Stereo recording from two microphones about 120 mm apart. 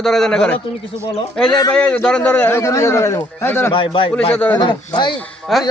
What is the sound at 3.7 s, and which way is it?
Speech, 45° left (ahead or behind).